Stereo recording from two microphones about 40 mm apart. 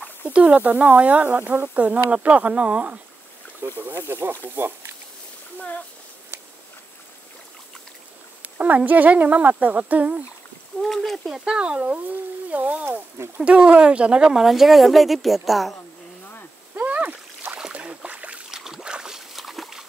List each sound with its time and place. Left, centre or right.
0.3 s speech: right
3.6 s speech: right
4.6 s speech: right
5.6 s speech: left
8.4 s speech: right
10.8 s a woman's voice: centre
11.3 s speech: right
12.4 s speech: right
13.4 s speech: right
14.3 s a woman's voice: centre
16.7 s splash: right
17.7 s boat: right
18.5 s boat: centre
19.3 s trickle: centre